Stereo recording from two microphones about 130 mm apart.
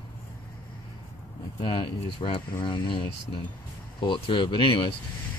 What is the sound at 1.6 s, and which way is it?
Speech, 40° left (ahead or behind).